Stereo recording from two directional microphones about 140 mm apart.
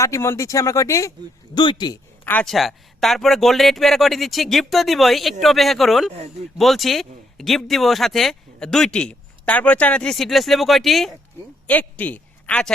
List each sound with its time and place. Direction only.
0.0 s speech: 20° left (ahead or behind)
1.5 s speech: 30° left (ahead or behind)
2.2 s speech: 10° left (ahead or behind)
2.5 s speech: centre (ahead or behind)
11.7 s speech: 10° left (ahead or behind)